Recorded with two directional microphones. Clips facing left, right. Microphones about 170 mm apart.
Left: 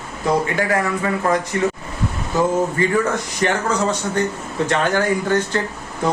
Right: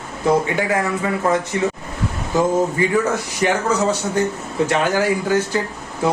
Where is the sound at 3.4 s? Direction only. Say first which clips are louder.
Right 1 dB; 15° right (ahead or behind).